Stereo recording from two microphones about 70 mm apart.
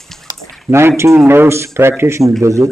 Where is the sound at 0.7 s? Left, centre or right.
Right.